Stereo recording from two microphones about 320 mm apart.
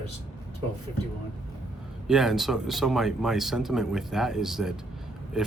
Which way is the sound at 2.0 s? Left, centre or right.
Centre.